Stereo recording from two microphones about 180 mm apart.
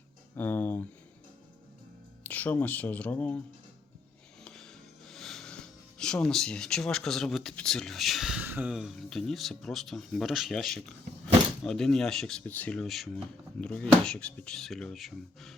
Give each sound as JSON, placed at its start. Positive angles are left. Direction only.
{"t": 0.3, "sound": "a sound", "side_deg": 10}
{"t": 2.2, "sound": "speech", "side_deg": 10}
{"t": 4.4, "sound": "speech", "side_deg": 5}